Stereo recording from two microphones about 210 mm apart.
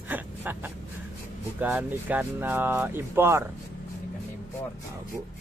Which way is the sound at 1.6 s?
10° right (ahead or behind).